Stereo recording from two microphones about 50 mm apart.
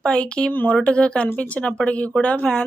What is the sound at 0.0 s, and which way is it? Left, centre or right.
Speech, centre.